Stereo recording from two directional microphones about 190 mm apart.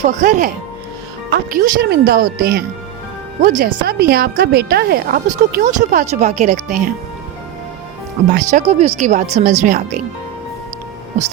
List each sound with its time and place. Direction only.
0.0 s a woman's voice: 40° right (ahead or behind)
5.4 s speech: 40° right (ahead or behind)
8.4 s speech: 35° right (ahead or behind)